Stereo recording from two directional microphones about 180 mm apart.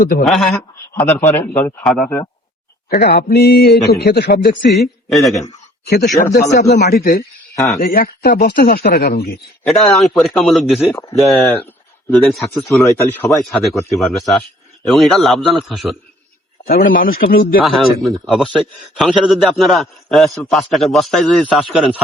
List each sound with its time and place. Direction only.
0.0 s a man's voice: 50° left (ahead or behind)
0.3 s a man's voice: centre (ahead or behind)
1.8 s speech: 5° left (ahead or behind)
2.9 s a man's voice: 55° left (ahead or behind)
5.1 s speech: centre (ahead or behind)
5.8 s a man's voice: 65° left (ahead or behind)
9.6 s speech: centre (ahead or behind)
11.4 s a man's voice: 10° left (ahead or behind)
12.1 s speech: centre (ahead or behind)
12.8 s a man's voice: 15° left (ahead or behind)
13.3 s speech: centre (ahead or behind)
16.6 s a man's voice: 55° left (ahead or behind)
17.6 s speech: centre (ahead or behind)